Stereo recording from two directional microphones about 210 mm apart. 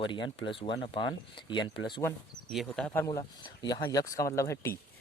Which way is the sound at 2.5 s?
Centre (ahead or behind).